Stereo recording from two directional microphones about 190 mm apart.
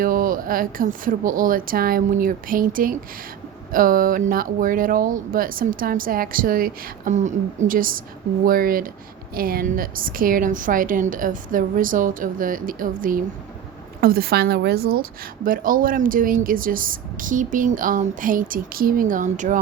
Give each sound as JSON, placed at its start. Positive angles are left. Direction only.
{"t": 0.0, "sound": "speech", "side_deg": -45}